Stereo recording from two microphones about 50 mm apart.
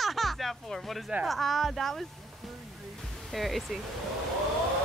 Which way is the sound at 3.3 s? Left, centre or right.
Centre.